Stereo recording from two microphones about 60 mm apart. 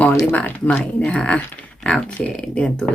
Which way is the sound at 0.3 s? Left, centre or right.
Left.